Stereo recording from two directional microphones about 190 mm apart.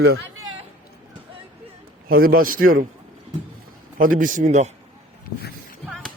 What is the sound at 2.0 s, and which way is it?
Speech, 50° right (ahead or behind).